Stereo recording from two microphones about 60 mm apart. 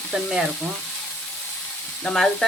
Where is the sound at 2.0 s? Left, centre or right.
Centre.